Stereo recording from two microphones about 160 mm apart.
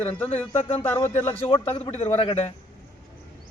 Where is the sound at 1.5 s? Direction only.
30° left (ahead or behind).